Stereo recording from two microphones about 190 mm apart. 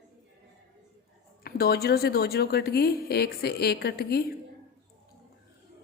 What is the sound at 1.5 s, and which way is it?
A woman's voice, 55° left (ahead or behind).